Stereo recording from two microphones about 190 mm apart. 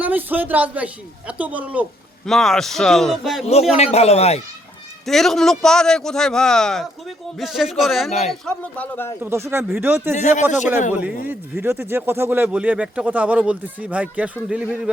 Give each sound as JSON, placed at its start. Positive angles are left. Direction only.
{"t": 0.0, "sound": "a man's voice", "side_deg": -10}
{"t": 3.4, "sound": "speech", "side_deg": 35}
{"t": 5.0, "sound": "a man's voice", "side_deg": 0}
{"t": 9.2, "sound": "speech", "side_deg": -15}
{"t": 10.2, "sound": "speech", "side_deg": 40}
{"t": 11.3, "sound": "a man's voice", "side_deg": -10}